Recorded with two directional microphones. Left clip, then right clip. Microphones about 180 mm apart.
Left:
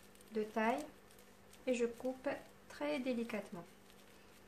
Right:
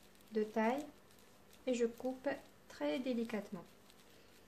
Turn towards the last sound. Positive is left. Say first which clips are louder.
# right 1 dB
turn(degrees=-30)  # may be behind; listen again after turning